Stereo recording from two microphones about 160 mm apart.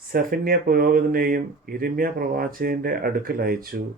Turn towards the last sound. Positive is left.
turn(degrees=-65)  # may be behind; listen again after turning